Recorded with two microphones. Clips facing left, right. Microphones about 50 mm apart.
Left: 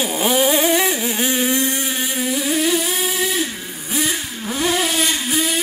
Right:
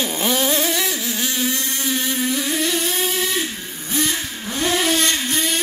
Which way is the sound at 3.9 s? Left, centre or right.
Centre.